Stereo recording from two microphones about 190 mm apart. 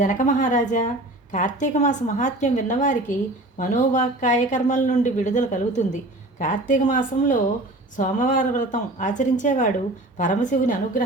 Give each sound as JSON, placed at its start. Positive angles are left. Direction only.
{"t": 0.0, "sound": "a woman's voice", "side_deg": 45}